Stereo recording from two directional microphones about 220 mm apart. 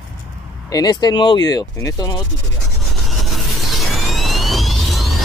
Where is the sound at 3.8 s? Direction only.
Centre (ahead or behind).